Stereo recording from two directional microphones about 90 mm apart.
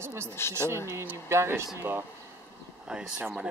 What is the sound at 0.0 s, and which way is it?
Speech, 30° right (ahead or behind).